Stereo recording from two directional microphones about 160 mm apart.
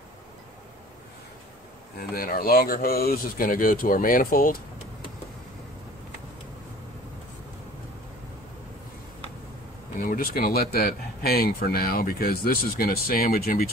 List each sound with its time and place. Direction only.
2.0 s speech: 65° left (ahead or behind)
9.9 s speech: 60° left (ahead or behind)